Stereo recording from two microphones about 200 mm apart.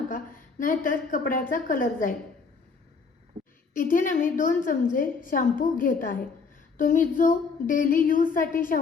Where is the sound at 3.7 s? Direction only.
40° left (ahead or behind).